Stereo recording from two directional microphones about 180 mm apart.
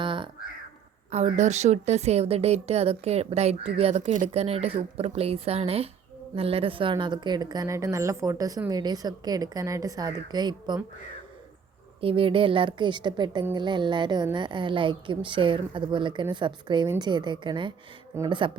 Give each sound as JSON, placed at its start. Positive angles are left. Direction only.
{"t": 0.0, "sound": "a sound", "side_deg": -25}
{"t": 1.1, "sound": "a woman's voice", "side_deg": -40}
{"t": 11.9, "sound": "a woman's voice", "side_deg": -30}